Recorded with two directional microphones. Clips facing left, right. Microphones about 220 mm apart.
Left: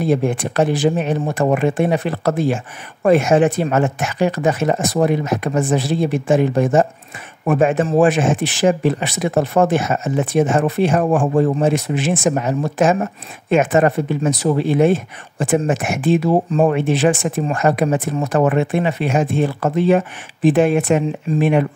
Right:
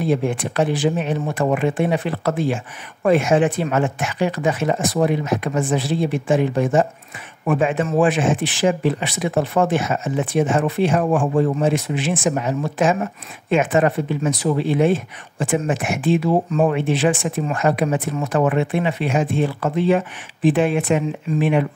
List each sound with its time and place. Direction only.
0.0 s speech: 45° left (ahead or behind)